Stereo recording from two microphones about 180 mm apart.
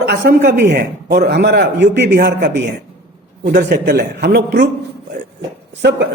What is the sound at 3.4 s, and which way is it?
Speech, 60° right (ahead or behind).